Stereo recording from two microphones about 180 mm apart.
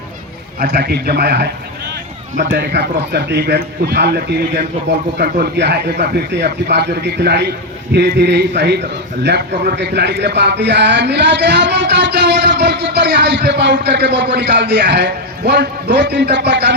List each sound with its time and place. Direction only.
0.6 s a man's voice: 60° right (ahead or behind)
2.6 s a man's voice: 70° right (ahead or behind)